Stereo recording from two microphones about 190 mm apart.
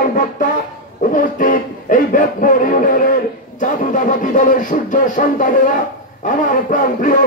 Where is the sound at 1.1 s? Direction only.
45° left (ahead or behind).